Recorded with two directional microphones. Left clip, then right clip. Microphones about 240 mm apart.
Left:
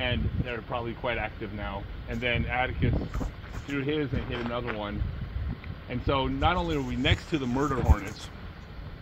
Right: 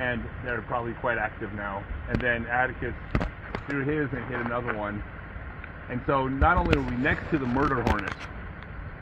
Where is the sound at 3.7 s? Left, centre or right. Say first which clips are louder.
Right 1 dB; centre.